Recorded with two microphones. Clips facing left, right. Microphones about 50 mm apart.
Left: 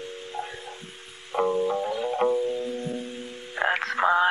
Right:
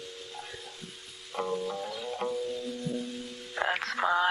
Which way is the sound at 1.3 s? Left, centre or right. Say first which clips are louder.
Left 8 dB; centre.